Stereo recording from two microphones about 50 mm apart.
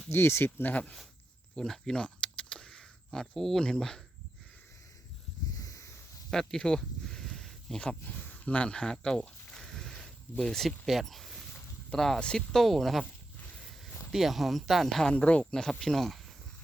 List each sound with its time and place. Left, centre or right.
0.1 s speech: left
0.4 s speech: left
1.5 s speech: centre
2.0 s a sound: centre
6.5 s a sound: centre
8.0 s speech: left
8.4 s speech: left; by 13.1 s centre
14.1 s speech: centre
15.1 s speech: left
15.8 s speech: centre